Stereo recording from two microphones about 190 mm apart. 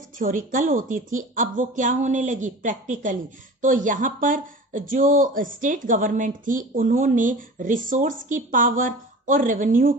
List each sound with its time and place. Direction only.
0.2 s speech: 45° right (ahead or behind)